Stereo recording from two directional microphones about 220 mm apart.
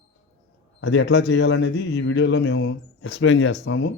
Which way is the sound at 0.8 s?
55° left (ahead or behind).